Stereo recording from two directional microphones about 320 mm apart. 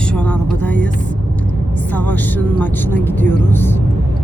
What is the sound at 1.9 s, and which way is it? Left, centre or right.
Speech, centre.